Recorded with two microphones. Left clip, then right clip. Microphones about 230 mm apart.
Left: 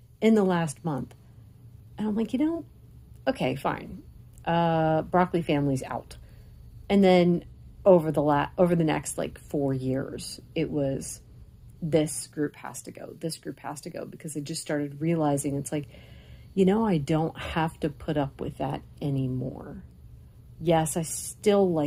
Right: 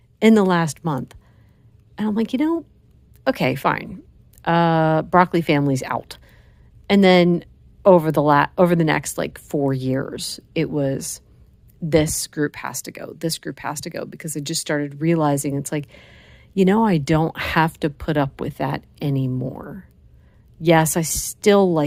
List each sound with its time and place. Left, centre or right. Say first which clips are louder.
0.2 s speech: right 7 dB; right